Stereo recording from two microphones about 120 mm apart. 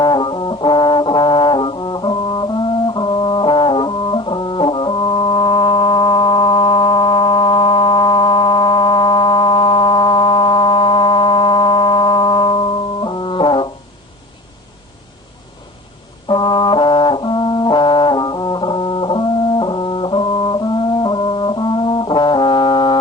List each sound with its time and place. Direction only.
0.0 s brass instrument: 40° left (ahead or behind)
16.3 s brass instrument: 40° left (ahead or behind)